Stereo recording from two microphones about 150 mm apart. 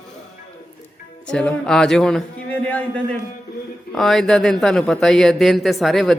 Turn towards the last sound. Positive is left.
turn(degrees=0)  # may be behind; listen again after turning